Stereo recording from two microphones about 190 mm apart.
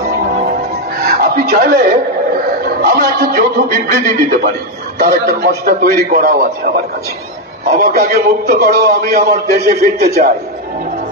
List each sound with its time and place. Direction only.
1.0 s a sound: 45° right (ahead or behind)
2.8 s music: 50° right (ahead or behind)
4.9 s a man's voice: 60° right (ahead or behind)
5.7 s music: 55° right (ahead or behind)
7.7 s a man's voice: 55° right (ahead or behind)